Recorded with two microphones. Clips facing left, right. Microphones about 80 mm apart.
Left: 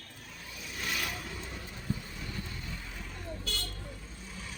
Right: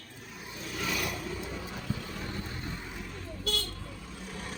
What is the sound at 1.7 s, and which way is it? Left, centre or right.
Vehicle, right.